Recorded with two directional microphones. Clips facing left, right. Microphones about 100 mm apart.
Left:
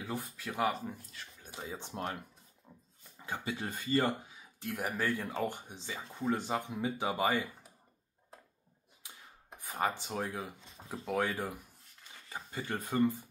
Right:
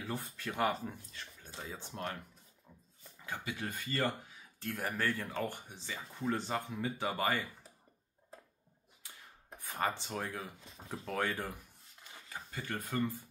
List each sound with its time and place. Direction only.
0.0 s speech: 15° left (ahead or behind)
0.5 s speech: 5° left (ahead or behind)
1.4 s speech: 15° left (ahead or behind)
3.2 s speech: 25° left (ahead or behind)
9.6 s speech: 15° left (ahead or behind)